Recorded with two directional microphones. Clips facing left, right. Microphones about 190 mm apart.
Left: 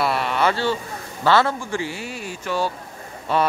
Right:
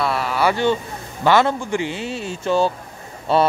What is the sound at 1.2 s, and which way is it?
Speech, 15° right (ahead or behind).